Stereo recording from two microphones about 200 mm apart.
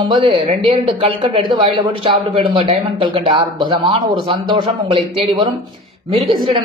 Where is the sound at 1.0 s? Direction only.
25° right (ahead or behind).